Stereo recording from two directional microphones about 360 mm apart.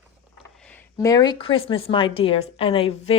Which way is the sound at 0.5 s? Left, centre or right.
Centre.